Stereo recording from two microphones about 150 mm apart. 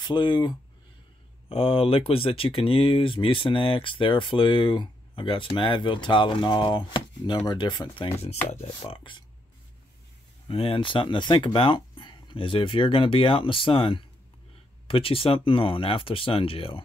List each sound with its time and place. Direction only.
0.0 s speech: 30° left (ahead or behind)
1.5 s speech: 40° left (ahead or behind)
10.5 s speech: 40° left (ahead or behind)